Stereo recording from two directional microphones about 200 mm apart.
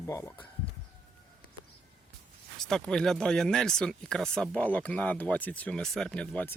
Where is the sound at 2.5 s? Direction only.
Centre (ahead or behind).